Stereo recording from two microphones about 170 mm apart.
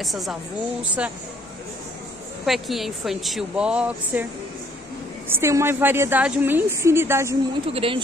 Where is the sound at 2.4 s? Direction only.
Centre (ahead or behind).